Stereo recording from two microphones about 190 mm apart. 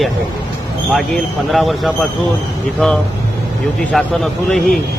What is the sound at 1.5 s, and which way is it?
A man's voice, centre (ahead or behind).